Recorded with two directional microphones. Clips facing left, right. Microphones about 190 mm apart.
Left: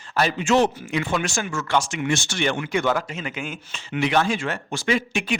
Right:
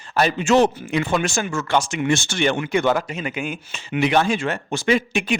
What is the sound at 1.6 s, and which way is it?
Speech, 20° right (ahead or behind).